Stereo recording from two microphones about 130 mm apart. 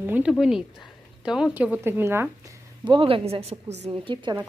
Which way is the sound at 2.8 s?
40° right (ahead or behind).